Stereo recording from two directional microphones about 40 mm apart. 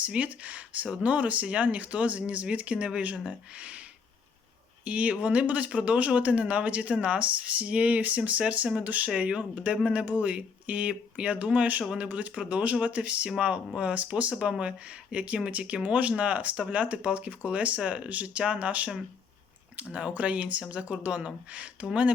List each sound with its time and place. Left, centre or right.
0.0 s speech: right
4.9 s speech: right
9.0 s speech: right
19.9 s speech: right